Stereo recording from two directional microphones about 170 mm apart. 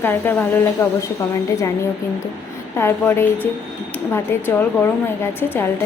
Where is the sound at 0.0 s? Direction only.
10° left (ahead or behind).